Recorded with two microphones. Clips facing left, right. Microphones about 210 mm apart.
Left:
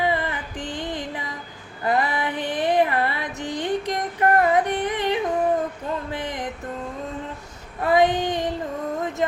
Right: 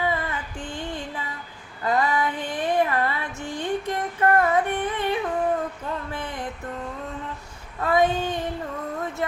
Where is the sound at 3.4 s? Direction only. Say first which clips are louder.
Left 3 dB; 20° left (ahead or behind).